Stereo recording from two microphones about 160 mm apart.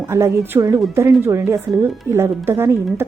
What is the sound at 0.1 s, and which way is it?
A woman's voice, 15° right (ahead or behind).